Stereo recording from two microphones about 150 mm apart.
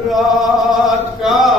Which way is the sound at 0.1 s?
Centre (ahead or behind).